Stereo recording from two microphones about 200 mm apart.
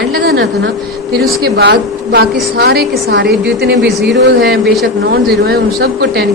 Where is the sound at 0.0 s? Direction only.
50° right (ahead or behind).